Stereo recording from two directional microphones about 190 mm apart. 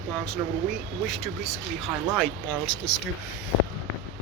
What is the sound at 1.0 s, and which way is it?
Speech, centre (ahead or behind).